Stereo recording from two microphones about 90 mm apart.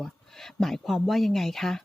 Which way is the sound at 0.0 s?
5° left (ahead or behind).